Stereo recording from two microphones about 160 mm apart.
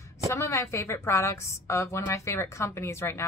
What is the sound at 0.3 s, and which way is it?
A woman's voice, 20° left (ahead or behind).